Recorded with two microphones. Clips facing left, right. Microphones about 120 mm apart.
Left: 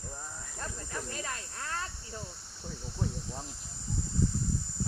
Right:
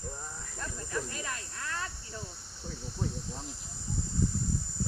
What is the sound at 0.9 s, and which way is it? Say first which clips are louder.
Snake: right 3 dB; 30° left (ahead or behind).